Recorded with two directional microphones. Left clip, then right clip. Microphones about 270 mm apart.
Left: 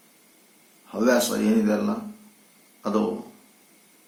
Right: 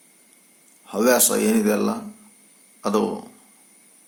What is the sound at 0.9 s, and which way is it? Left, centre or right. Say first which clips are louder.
Speech: right 3 dB; right.